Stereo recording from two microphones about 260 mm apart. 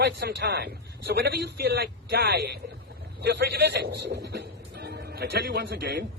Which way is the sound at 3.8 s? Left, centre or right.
Right.